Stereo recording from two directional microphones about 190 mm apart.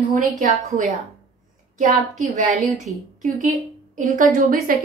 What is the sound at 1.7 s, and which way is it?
A woman's voice, 40° right (ahead or behind).